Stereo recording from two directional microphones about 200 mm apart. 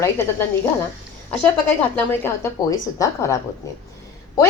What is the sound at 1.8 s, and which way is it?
A woman's voice, 10° left (ahead or behind).